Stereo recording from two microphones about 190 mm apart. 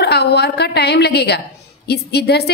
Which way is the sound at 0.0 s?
55° left (ahead or behind).